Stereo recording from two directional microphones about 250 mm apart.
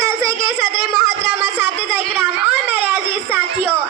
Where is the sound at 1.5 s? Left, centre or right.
Centre.